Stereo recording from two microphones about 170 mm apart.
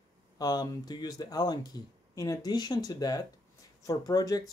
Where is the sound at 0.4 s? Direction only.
25° left (ahead or behind).